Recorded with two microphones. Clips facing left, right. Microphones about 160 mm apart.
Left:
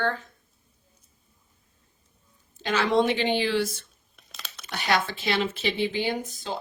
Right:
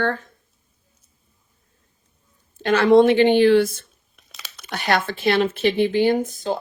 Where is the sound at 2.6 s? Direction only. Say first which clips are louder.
Right 9 dB; 55° right (ahead or behind).